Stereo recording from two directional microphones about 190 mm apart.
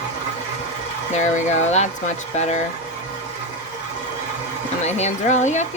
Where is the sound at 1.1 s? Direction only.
40° left (ahead or behind).